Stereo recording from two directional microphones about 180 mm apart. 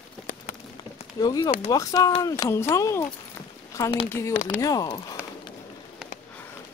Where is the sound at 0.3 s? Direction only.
40° left (ahead or behind).